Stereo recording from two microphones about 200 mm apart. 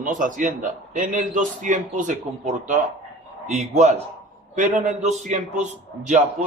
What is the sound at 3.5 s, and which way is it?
A man's voice, 35° right (ahead or behind).